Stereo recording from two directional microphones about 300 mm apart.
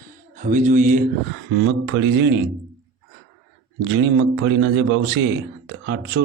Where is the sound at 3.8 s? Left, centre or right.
Right.